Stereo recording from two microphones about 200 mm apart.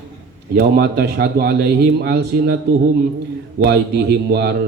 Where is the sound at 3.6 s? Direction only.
55° right (ahead or behind).